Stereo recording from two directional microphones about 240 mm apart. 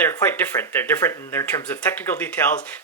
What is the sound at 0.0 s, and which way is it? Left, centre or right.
Speech, centre.